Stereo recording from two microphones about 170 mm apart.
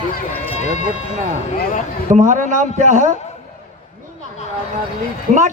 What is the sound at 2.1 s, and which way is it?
Speech, 45° right (ahead or behind).